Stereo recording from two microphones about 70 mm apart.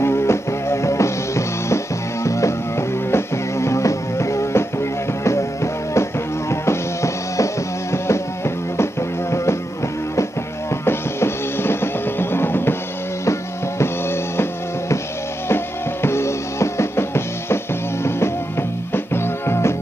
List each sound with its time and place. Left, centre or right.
0.0 s music: left
10.9 s music: left
13.2 s music: left
15.4 s drum: left
19.1 s music: left